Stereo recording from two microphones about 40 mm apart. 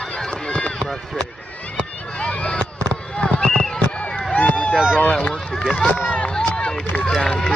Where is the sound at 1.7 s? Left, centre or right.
Left.